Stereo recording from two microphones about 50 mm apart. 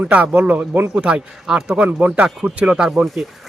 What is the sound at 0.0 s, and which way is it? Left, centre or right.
Speech, right.